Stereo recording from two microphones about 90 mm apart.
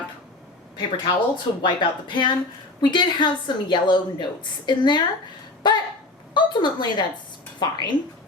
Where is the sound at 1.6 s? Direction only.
60° left (ahead or behind).